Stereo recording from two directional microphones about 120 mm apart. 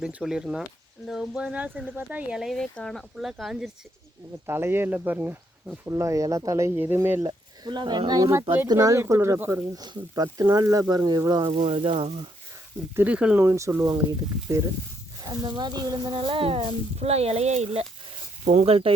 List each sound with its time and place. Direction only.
0.0 s speech: 5° right (ahead or behind)
4.4 s speech: 20° right (ahead or behind)
5.9 s speech: 25° right (ahead or behind)
7.3 s speech: 35° right (ahead or behind); by 9.6 s 20° right (ahead or behind)
9.7 s speech: 35° right (ahead or behind)
11.5 s speech: 55° right (ahead or behind)
13.0 s speech: 10° right (ahead or behind)
13.4 s speech: 25° right (ahead or behind)
15.2 s speech: 35° right (ahead or behind)
16.2 s speech: 50° right (ahead or behind)